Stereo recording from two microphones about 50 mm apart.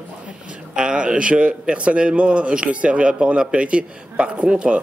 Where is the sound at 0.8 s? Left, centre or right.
Centre.